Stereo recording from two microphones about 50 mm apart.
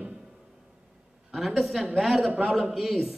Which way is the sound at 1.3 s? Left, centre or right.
Centre.